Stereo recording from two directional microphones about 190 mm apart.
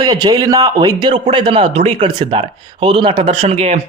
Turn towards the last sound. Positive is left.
turn(degrees=-35)  # may be behind; listen again after turning